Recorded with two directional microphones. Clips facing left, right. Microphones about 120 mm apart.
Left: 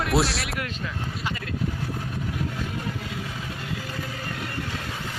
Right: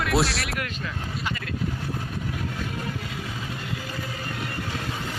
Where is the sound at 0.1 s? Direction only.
Centre (ahead or behind).